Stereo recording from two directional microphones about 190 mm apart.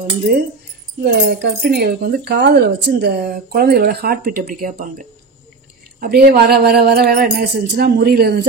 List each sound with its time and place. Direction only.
0.2 s speech: 55° right (ahead or behind)
5.9 s speech: 55° right (ahead or behind)